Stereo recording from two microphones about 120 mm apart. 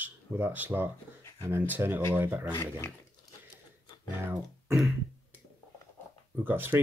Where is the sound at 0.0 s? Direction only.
15° right (ahead or behind).